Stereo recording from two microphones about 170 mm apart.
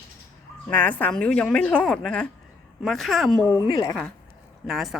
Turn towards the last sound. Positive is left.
turn(degrees=0)  # may be behind; listen again after turning